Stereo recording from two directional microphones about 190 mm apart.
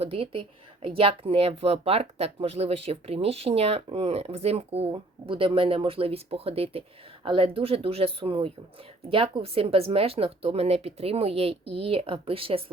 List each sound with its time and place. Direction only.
0.0 s speech: 30° right (ahead or behind)